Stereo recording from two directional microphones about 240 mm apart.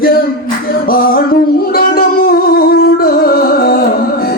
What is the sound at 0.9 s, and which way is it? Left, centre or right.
Music, left.